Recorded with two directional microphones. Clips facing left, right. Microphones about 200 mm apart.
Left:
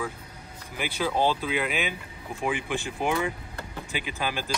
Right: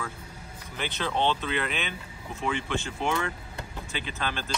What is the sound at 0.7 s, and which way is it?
Speech, 10° left (ahead or behind).